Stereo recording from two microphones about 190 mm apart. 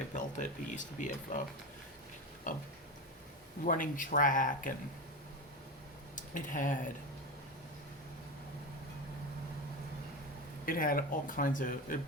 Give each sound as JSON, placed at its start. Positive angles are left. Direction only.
{"t": 0.2, "sound": "speech", "side_deg": 40}
{"t": 2.5, "sound": "speech", "side_deg": 45}
{"t": 3.7, "sound": "speech", "side_deg": 45}
{"t": 6.1, "sound": "speech", "side_deg": 45}
{"t": 10.7, "sound": "speech", "side_deg": 50}